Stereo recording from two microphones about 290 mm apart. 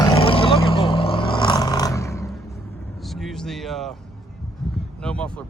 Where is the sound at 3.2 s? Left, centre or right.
Centre.